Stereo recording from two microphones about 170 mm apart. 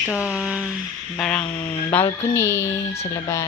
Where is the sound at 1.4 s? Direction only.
30° left (ahead or behind).